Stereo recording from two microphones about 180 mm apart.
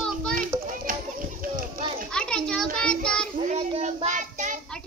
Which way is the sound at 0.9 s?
50° right (ahead or behind).